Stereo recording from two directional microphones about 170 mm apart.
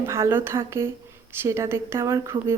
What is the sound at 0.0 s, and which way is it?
A woman's voice, 15° right (ahead or behind).